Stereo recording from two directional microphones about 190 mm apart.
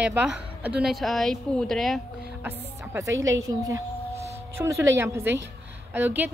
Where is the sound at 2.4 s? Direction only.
10° right (ahead or behind).